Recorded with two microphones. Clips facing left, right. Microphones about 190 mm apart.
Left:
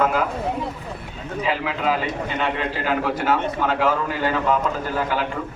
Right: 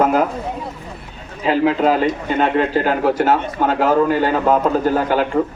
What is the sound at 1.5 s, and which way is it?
A man's voice, 45° right (ahead or behind).